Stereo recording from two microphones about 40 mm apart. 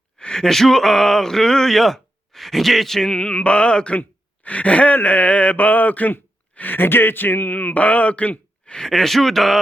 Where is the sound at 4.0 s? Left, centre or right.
Left.